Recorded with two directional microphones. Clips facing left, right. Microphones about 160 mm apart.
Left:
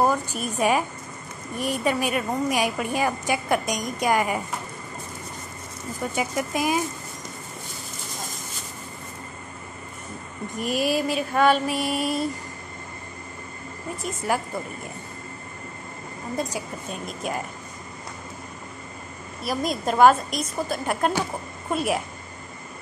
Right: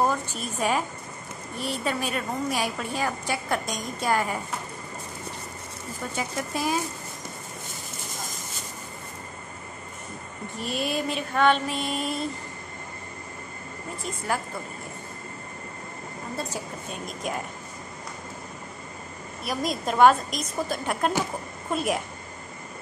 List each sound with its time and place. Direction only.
0.0 s a woman's voice: 10° left (ahead or behind)
6.1 s a woman's voice: 15° left (ahead or behind)
10.6 s a woman's voice: 10° left (ahead or behind)
16.3 s a woman's voice: 15° left (ahead or behind)
16.9 s a woman's voice: centre (ahead or behind)
19.4 s a woman's voice: centre (ahead or behind)